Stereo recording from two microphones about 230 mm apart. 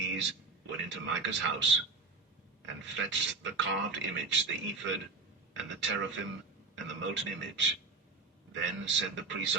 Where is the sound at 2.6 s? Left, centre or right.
Right.